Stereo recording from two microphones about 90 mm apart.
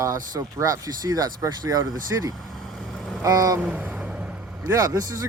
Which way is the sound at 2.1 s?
30° right (ahead or behind).